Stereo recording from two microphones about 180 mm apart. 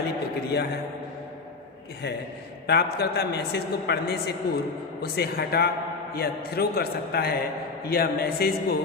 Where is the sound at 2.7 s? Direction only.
65° left (ahead or behind).